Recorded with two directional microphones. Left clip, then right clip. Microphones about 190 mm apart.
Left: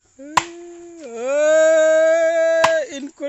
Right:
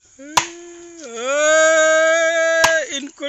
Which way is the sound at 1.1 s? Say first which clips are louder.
Even; 25° left (ahead or behind).